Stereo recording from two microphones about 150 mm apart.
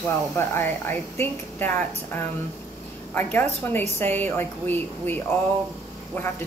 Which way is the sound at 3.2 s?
15° left (ahead or behind).